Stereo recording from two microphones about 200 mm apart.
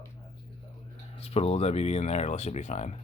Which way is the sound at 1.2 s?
30° left (ahead or behind).